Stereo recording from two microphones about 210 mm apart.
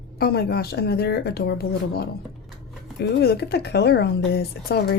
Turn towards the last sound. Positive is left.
turn(degrees=50)  # may be behind; listen again after turning